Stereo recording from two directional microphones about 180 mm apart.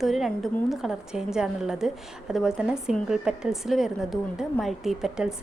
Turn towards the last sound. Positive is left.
turn(degrees=-5)  # may be behind; listen again after turning